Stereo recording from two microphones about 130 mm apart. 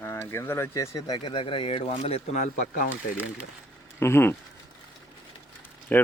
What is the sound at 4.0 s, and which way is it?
Speech, 20° left (ahead or behind).